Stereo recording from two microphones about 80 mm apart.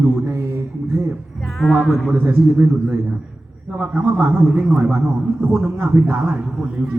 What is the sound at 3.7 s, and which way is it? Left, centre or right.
Speech, centre.